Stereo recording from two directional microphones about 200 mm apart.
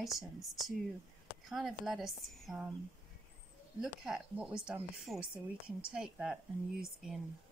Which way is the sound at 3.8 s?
5° right (ahead or behind).